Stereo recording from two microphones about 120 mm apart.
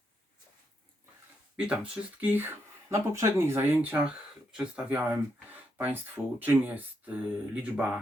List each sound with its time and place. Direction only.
1.5 s speech: 10° right (ahead or behind)